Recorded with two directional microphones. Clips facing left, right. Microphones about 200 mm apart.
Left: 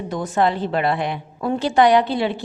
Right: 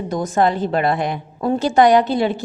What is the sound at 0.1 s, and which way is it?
A woman's voice, 40° right (ahead or behind).